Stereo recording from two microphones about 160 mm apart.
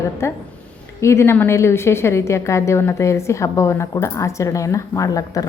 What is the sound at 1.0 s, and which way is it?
A woman's voice, 15° left (ahead or behind).